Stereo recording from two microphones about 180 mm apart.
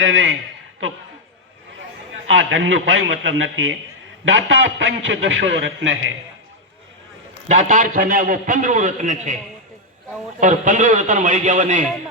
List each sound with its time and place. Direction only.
0.0 s a man's voice: 90° right
2.3 s a man's voice: 90° right
7.4 s a man's voice: 45° right (ahead or behind)
10.4 s a man's voice: 45° right (ahead or behind)